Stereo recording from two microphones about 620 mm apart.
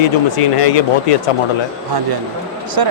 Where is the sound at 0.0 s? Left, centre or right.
Left.